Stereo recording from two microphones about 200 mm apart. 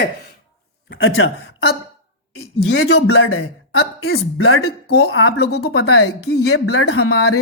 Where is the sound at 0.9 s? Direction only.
75° left (ahead or behind).